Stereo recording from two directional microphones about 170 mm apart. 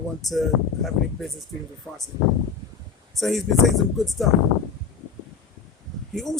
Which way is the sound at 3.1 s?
Centre (ahead or behind).